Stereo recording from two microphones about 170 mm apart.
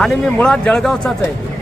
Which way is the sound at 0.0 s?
5° left (ahead or behind).